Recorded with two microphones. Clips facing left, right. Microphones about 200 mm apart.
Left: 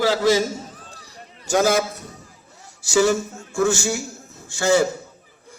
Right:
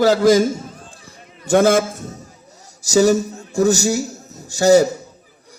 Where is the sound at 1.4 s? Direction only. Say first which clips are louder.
Right 5 dB; 55° right (ahead or behind).